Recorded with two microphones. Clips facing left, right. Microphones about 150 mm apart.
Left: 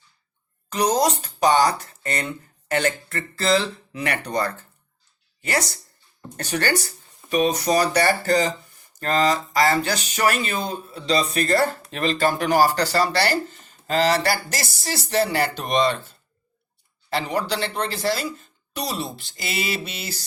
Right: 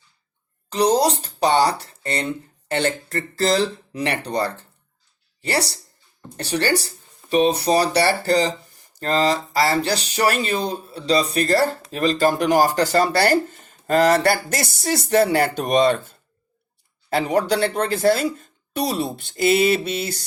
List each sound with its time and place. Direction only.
0.7 s a woman's voice: 30° right (ahead or behind); by 20.2 s 50° right (ahead or behind)